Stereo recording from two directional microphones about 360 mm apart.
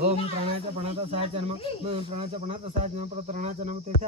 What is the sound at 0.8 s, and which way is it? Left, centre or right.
Speech, centre.